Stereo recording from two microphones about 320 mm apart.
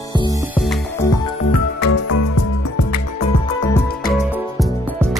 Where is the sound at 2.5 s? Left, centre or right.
Left.